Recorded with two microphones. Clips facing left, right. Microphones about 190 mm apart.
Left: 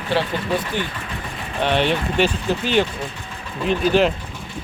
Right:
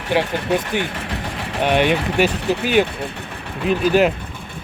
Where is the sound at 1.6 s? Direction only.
10° right (ahead or behind).